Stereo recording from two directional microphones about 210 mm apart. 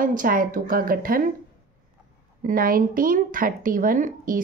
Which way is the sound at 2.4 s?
40° right (ahead or behind).